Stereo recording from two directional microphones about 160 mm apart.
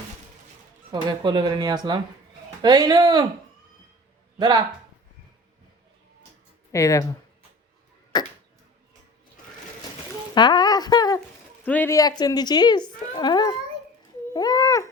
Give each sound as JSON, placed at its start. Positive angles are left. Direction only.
{"t": 0.9, "sound": "speech", "side_deg": -30}
{"t": 4.4, "sound": "speech", "side_deg": -25}
{"t": 6.7, "sound": "a woman's voice", "side_deg": 20}
{"t": 8.1, "sound": "arrow", "side_deg": 25}
{"t": 10.3, "sound": "a sound", "side_deg": 25}
{"t": 11.6, "sound": "speech", "side_deg": 10}
{"t": 11.9, "sound": "a woman's voice", "side_deg": 25}
{"t": 14.3, "sound": "a sound", "side_deg": 25}